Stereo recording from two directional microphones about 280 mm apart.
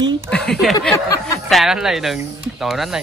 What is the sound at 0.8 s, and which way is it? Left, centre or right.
Speech, centre.